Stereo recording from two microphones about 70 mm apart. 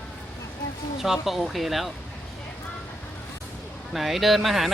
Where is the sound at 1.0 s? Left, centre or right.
Centre.